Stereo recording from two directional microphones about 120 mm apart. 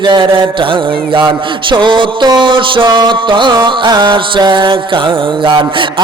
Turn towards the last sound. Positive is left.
turn(degrees=-45)  # may be behind; listen again after turning